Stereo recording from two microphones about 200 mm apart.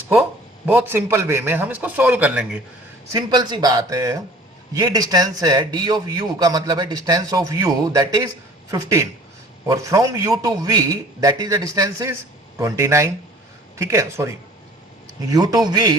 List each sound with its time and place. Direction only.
0.2 s a man's voice: 10° right (ahead or behind)
3.1 s a man's voice: 20° right (ahead or behind)